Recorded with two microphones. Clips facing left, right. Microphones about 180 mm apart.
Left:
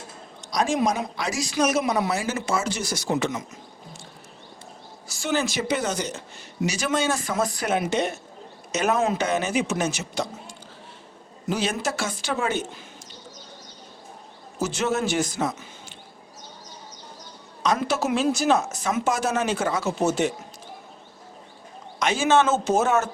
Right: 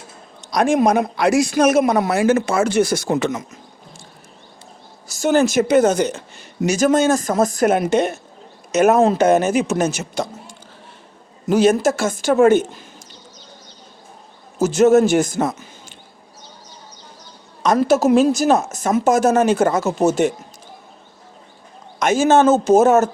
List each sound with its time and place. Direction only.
0.4 s a man's voice: 55° right (ahead or behind)
5.0 s speech: 45° right (ahead or behind)
6.6 s speech: 45° right (ahead or behind)
14.6 s speech: 45° right (ahead or behind)
17.7 s speech: 40° right (ahead or behind)
21.9 s a man's voice: 45° right (ahead or behind)